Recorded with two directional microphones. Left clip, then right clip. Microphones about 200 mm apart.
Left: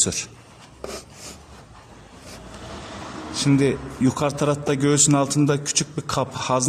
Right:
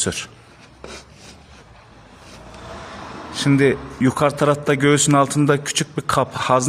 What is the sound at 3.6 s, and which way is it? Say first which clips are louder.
A man's voice: right 4 dB; 15° right (ahead or behind).